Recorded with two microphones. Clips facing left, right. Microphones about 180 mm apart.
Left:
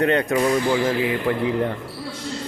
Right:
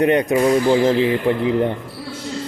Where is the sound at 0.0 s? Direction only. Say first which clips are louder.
Right 4 dB; 20° right (ahead or behind).